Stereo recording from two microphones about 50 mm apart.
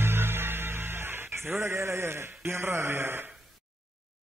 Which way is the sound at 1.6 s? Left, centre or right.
Right.